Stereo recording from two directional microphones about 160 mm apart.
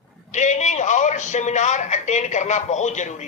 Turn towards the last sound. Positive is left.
turn(degrees=50)  # may be behind; listen again after turning